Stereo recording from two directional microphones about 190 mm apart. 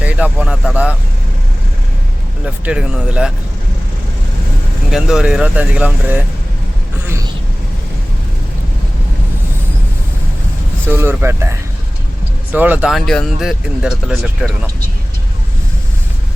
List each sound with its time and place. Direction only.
0.0 s vehicle: 5° right (ahead or behind)
2.6 s speech: 5° right (ahead or behind)
4.9 s speech: centre (ahead or behind)
10.9 s speech: 10° right (ahead or behind)
12.5 s speech: 10° right (ahead or behind)